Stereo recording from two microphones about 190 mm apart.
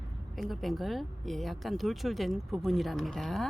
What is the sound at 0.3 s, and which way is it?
Speech, centre (ahead or behind).